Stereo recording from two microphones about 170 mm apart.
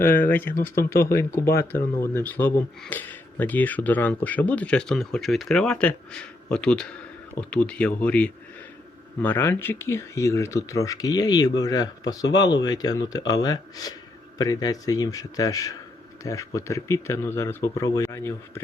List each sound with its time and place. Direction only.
0.0 s speech: 10° left (ahead or behind)